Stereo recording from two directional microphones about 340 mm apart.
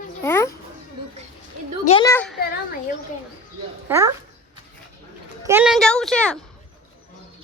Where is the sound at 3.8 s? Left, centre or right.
Centre.